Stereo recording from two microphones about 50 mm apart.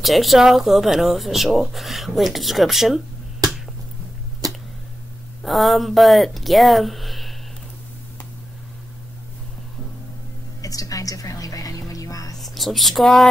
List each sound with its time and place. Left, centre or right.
0.0 s speech: centre
5.4 s speech: centre
12.4 s speech: centre